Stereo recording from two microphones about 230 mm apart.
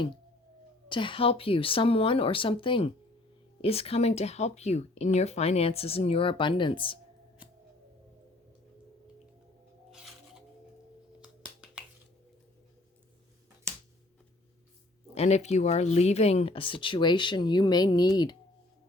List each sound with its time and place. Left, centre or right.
0.9 s speech: left
9.9 s music: centre
11.2 s a sound: centre
15.1 s speech: left